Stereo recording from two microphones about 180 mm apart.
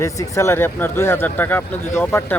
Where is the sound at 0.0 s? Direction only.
15° left (ahead or behind).